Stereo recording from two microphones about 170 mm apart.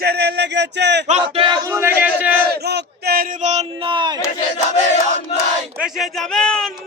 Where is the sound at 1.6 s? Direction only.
15° right (ahead or behind).